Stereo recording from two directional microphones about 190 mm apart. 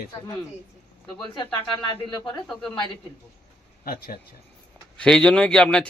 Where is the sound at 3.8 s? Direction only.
50° left (ahead or behind).